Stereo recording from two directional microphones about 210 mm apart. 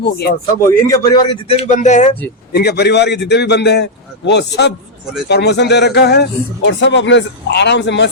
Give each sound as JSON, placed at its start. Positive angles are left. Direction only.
{"t": 0.0, "sound": "a man's voice", "side_deg": 50}
{"t": 0.6, "sound": "a man's voice", "side_deg": 15}
{"t": 1.6, "sound": "speech", "side_deg": 35}
{"t": 2.5, "sound": "a man's voice", "side_deg": 50}